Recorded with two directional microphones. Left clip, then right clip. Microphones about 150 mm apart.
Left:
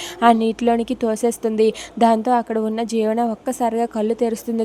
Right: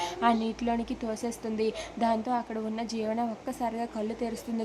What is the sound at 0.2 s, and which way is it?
A woman's voice, 55° left (ahead or behind).